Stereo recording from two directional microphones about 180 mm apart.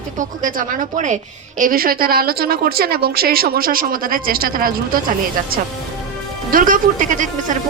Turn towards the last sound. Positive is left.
turn(degrees=-45)  # may be behind; listen again after turning